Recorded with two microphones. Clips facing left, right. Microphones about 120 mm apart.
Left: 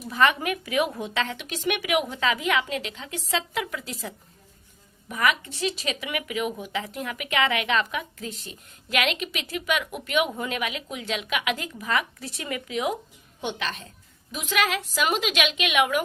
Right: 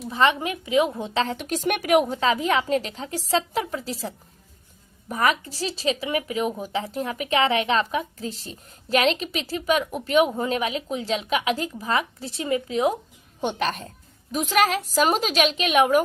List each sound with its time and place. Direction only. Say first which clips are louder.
0.0 s a woman's voice: right 1 dB; 25° right (ahead or behind)